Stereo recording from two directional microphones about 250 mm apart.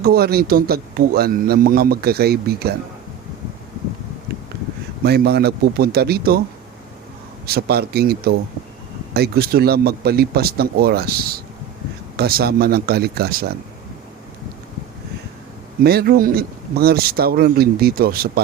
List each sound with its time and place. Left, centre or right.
0.0 s a man's voice: right
5.0 s a man's voice: right
7.4 s a man's voice: right
15.8 s a man's voice: right